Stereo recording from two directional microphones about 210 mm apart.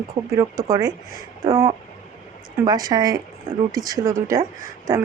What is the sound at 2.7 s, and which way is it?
Speech, 20° right (ahead or behind).